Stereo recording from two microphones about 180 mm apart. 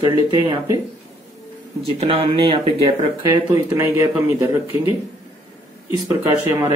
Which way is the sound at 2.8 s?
15° right (ahead or behind).